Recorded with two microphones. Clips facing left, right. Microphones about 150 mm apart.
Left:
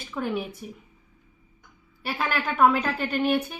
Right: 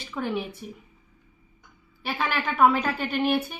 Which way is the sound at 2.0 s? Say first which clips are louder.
Even; centre (ahead or behind).